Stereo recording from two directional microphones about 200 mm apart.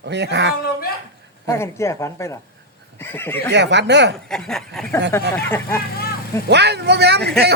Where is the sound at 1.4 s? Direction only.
15° left (ahead or behind).